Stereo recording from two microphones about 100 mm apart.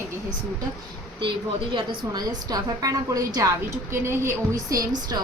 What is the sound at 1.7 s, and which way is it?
A woman's voice, 40° right (ahead or behind).